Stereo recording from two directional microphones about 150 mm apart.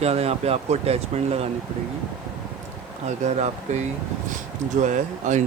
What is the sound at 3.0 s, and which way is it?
Speech, 50° right (ahead or behind).